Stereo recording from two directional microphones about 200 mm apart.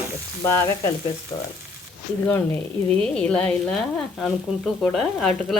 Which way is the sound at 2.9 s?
5° left (ahead or behind).